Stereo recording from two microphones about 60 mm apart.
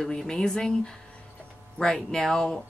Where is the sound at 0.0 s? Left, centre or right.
Centre.